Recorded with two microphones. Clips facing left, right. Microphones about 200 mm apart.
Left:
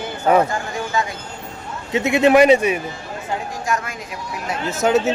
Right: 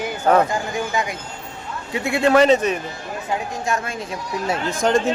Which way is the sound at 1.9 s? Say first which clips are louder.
Left 3 dB; 20° left (ahead or behind).